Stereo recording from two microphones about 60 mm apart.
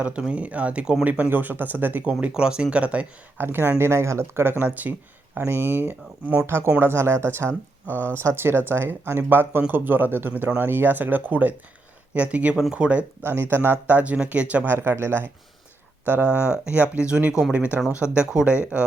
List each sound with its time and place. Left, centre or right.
0.0 s speech: centre
2.3 s speech: centre
3.3 s speech: right
3.8 s speech: right
4.6 s speech: right
6.4 s speech: right
7.9 s speech: left
8.1 s speech: right; by 13.1 s centre
13.2 s speech: right
13.8 s speech: right
14.7 s speech: right
16.2 s speech: centre